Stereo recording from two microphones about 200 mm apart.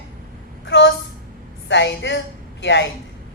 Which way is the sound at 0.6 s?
60° left (ahead or behind).